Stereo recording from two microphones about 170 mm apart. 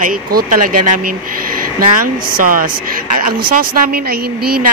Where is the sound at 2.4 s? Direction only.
55° right (ahead or behind).